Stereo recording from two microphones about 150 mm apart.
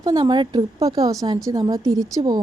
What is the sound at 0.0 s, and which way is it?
A woman's voice, 30° right (ahead or behind).